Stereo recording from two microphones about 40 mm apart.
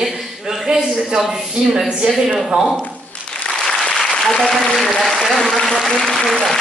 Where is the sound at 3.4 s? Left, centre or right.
Centre.